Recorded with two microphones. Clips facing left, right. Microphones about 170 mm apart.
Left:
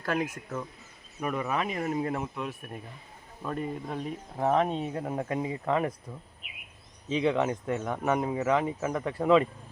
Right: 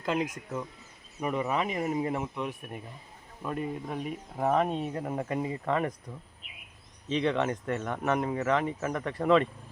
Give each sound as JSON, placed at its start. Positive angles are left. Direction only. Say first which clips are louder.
{"t": 0.0, "sound": "speech", "louder": "even", "side_deg": -20}
{"t": 3.4, "sound": "speech", "louder": "even", "side_deg": -5}
{"t": 7.1, "sound": "speech", "louder": "left 1 dB", "side_deg": 5}